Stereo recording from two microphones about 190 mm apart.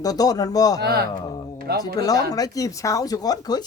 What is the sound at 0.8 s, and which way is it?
Speech, 55° right (ahead or behind).